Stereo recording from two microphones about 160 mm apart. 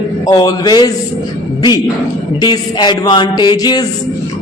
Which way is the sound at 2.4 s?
25° left (ahead or behind).